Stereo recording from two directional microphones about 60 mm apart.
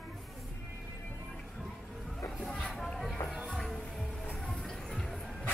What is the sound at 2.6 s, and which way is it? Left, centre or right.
Music, centre.